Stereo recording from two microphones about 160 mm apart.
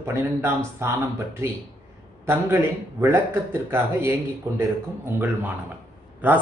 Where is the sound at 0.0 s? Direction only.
15° right (ahead or behind).